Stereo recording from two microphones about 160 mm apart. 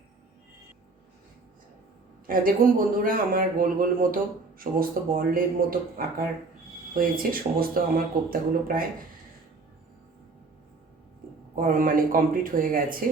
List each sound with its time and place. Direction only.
2.2 s a man's voice: 60° right (ahead or behind)
11.5 s a man's voice: 60° right (ahead or behind)